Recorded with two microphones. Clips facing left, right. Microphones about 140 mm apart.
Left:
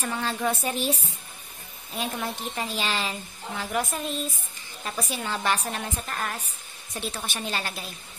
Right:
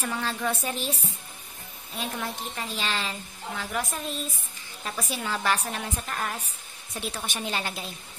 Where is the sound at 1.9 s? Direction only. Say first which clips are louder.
Left 2 dB; 10° left (ahead or behind).